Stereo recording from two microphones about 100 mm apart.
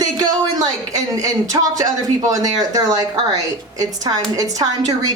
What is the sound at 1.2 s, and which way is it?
A woman's voice, 35° right (ahead or behind).